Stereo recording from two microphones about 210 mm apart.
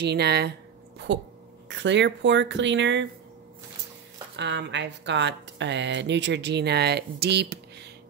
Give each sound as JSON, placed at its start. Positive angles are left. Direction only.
{"t": 0.0, "sound": "speech", "side_deg": -50}
{"t": 0.9, "sound": "a sound", "side_deg": -55}
{"t": 1.7, "sound": "speech", "side_deg": -55}
{"t": 4.4, "sound": "speech", "side_deg": -55}